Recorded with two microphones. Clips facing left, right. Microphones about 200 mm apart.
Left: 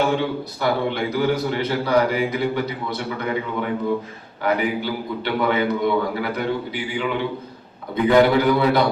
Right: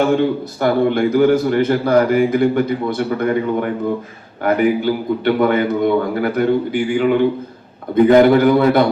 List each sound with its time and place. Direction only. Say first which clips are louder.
0.2 s a man's voice: right 7 dB; 50° right (ahead or behind)